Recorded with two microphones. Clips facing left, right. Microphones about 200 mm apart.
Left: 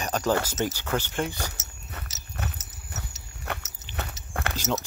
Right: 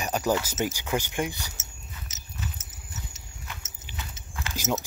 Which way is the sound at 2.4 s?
70° left (ahead or behind).